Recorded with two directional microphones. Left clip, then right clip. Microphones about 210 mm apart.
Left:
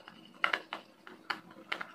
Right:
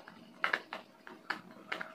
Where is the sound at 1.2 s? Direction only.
15° left (ahead or behind).